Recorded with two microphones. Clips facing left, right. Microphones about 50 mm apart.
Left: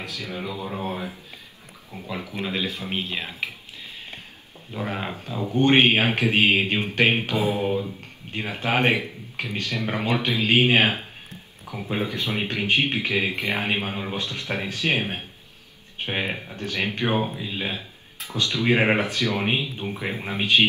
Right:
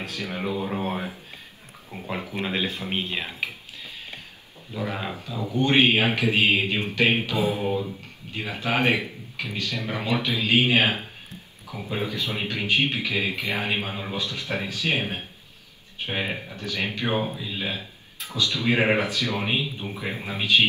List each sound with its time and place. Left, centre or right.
0.0 s speech: right
2.9 s speech: centre
4.7 s a man's voice: left
13.7 s speech: left
14.1 s speech: left
14.9 s speech: left
16.5 s speech: left
17.1 s speech: centre
17.4 s speech: left
19.5 s speech: centre